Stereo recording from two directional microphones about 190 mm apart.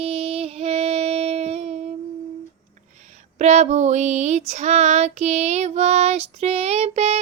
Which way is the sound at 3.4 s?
40° right (ahead or behind).